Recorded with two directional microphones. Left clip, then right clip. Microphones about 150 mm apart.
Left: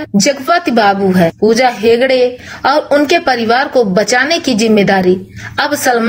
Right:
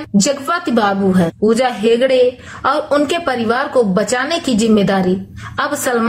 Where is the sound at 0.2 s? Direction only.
20° left (ahead or behind).